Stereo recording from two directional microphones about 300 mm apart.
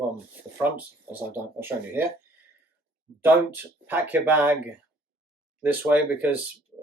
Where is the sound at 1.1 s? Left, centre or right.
Centre.